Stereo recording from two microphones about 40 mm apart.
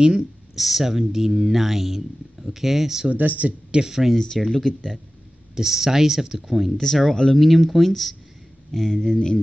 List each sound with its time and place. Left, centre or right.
0.6 s speech: centre
3.1 s speech: right
3.7 s speech: centre
4.4 s speech: centre
5.6 s speech: centre
6.8 s speech: centre
8.7 s speech: centre